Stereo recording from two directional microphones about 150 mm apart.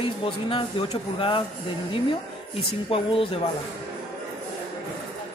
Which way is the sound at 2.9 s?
40° left (ahead or behind).